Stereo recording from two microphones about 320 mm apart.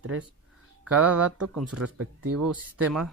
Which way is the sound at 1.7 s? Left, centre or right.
Right.